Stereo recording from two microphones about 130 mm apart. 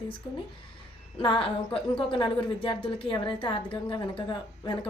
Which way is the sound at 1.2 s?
45° left (ahead or behind).